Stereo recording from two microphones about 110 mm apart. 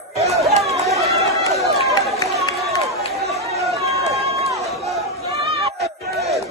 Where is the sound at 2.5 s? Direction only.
Centre (ahead or behind).